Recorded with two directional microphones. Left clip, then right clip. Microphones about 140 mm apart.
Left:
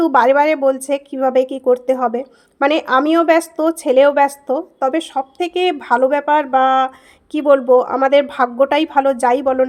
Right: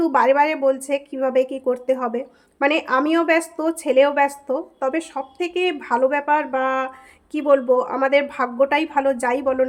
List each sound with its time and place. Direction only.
0.0 s a woman's voice: 40° left (ahead or behind)